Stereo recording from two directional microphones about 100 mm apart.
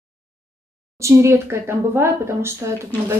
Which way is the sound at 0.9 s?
30° right (ahead or behind).